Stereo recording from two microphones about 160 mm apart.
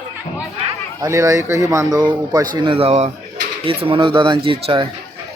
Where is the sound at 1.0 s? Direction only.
20° right (ahead or behind).